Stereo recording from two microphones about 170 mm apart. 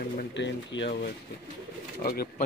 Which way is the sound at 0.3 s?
90° left.